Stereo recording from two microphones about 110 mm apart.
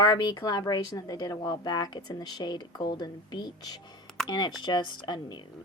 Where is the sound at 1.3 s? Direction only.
45° left (ahead or behind).